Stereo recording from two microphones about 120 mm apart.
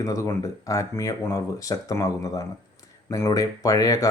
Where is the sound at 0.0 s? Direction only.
25° left (ahead or behind).